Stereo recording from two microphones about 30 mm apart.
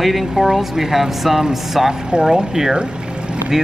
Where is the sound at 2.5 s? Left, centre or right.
Centre.